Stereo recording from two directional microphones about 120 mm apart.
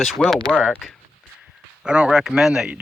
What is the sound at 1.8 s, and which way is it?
Speech, 5° right (ahead or behind).